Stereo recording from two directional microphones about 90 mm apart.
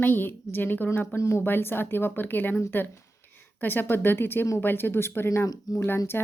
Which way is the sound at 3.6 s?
20° left (ahead or behind).